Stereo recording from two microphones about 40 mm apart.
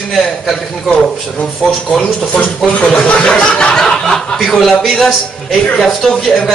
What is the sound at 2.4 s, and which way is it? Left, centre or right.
Speech, left.